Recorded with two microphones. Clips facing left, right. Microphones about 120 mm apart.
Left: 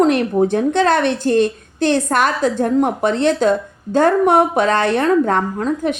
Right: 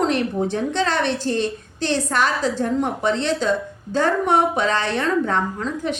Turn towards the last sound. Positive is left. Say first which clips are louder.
# left 6 dB
turn(degrees=50)  # may be behind; listen again after turning